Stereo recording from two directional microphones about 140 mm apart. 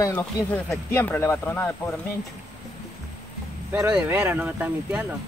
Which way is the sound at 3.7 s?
10° right (ahead or behind).